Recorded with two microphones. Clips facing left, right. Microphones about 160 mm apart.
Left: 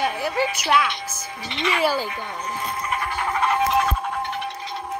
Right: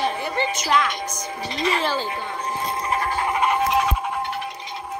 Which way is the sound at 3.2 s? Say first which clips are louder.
Left 1 dB; 15° right (ahead or behind).